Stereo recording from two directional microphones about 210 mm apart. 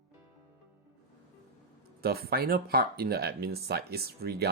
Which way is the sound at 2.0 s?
45° right (ahead or behind).